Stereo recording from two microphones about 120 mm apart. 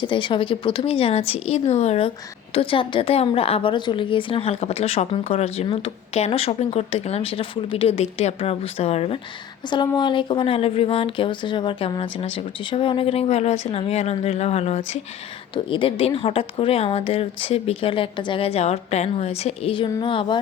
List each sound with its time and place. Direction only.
0.0 s a woman's voice: 40° left (ahead or behind); by 2.1 s 60° left (ahead or behind)
2.6 s a woman's voice: 45° left (ahead or behind)
9.6 s a woman's voice: 35° left (ahead or behind); by 14.8 s 60° left (ahead or behind)
15.5 s a woman's voice: 45° left (ahead or behind)